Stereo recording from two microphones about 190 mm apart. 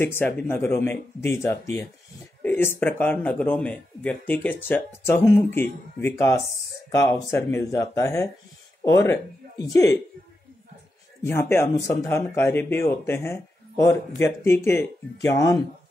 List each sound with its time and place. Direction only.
0.0 s speech: 10° left (ahead or behind)
11.2 s speech: 15° left (ahead or behind)